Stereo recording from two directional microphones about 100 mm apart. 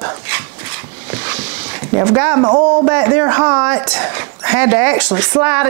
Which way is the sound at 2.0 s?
25° right (ahead or behind).